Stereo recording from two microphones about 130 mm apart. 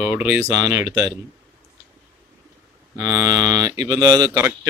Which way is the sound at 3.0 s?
20° right (ahead or behind).